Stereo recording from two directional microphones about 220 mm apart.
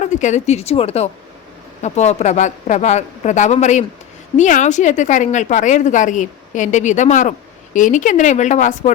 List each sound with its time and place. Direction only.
0.0 s a woman's voice: 35° left (ahead or behind)